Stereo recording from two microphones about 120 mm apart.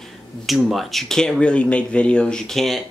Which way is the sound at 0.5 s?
Centre (ahead or behind).